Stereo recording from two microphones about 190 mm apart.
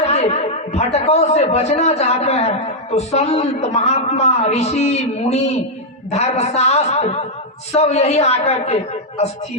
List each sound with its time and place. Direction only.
0.0 s a man's voice: 35° left (ahead or behind)